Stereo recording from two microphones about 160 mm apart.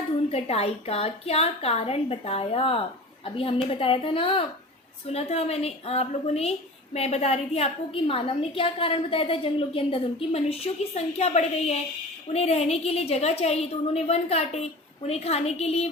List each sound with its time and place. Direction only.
0.3 s a woman's voice: 40° left (ahead or behind)